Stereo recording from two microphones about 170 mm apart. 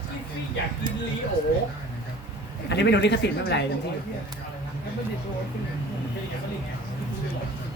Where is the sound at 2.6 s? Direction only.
90° left.